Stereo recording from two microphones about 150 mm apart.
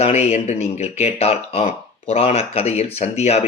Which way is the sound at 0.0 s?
45° left (ahead or behind).